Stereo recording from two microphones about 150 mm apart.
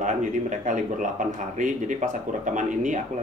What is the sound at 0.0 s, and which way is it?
Speech, 55° right (ahead or behind).